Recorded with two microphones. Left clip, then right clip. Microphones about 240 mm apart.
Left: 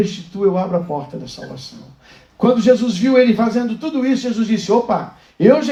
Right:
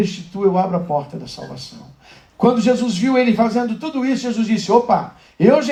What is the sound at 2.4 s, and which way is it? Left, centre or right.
A man's voice, right.